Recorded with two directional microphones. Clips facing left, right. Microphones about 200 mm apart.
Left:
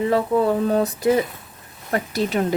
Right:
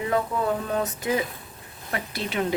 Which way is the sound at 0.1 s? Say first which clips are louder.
Left 4 dB; 35° left (ahead or behind).